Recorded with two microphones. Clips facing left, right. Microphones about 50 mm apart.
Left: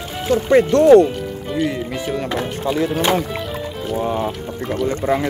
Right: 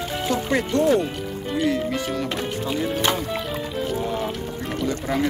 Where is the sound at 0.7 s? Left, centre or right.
Left.